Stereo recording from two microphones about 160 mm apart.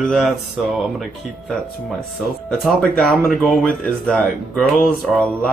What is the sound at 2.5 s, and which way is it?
Speech, 5° left (ahead or behind).